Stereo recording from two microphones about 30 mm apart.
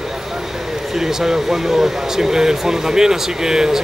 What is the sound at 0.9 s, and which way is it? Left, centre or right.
Speech, centre.